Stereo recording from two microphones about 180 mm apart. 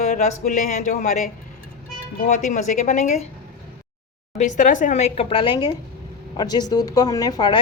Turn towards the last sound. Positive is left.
turn(degrees=20)  # may be behind; listen again after turning